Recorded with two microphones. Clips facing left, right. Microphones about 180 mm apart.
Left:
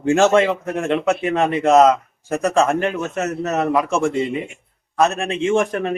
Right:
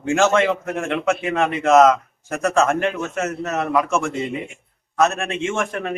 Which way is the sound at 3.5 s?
20° left (ahead or behind).